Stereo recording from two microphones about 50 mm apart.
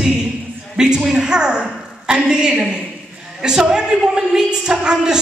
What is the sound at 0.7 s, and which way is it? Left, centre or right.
A woman's voice, centre.